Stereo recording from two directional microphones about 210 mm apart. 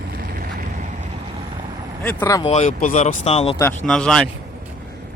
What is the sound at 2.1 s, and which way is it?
Speech, 10° left (ahead or behind).